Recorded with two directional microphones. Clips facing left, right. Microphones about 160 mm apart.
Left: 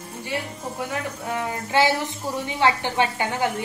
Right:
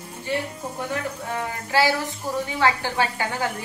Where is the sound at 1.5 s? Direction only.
20° left (ahead or behind).